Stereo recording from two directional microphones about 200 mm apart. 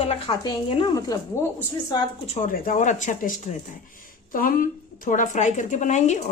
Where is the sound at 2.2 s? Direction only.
35° left (ahead or behind).